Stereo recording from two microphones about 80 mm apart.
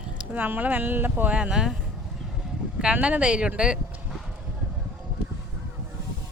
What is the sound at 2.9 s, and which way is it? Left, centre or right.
Speech, centre.